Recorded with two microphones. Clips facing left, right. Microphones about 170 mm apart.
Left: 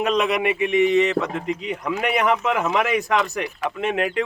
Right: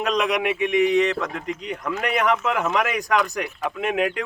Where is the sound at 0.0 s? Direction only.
5° left (ahead or behind).